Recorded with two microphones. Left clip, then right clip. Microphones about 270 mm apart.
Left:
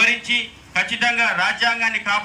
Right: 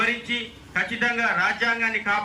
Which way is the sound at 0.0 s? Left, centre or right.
Centre.